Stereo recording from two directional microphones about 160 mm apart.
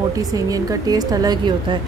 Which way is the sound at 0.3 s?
20° right (ahead or behind).